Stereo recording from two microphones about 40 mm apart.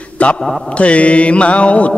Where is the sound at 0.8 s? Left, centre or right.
Left.